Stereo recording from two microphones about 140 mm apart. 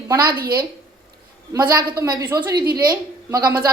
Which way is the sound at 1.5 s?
30° right (ahead or behind).